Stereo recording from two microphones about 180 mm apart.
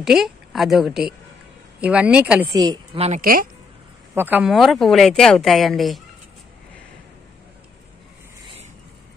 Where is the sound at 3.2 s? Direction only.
55° right (ahead or behind).